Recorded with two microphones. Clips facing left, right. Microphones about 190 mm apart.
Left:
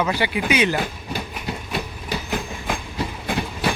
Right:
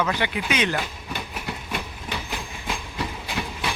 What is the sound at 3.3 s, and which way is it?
Train, 55° left (ahead or behind).